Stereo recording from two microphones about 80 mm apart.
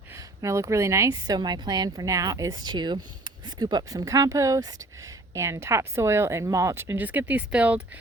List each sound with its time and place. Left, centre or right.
0.4 s a woman's voice: right
1.4 s speech: right
4.0 s a woman's voice: right
6.9 s speech: right